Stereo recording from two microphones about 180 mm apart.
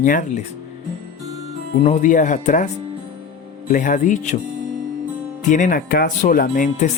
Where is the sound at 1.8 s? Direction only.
40° left (ahead or behind).